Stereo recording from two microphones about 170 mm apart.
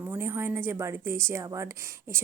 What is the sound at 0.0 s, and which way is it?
A woman's voice, 15° right (ahead or behind).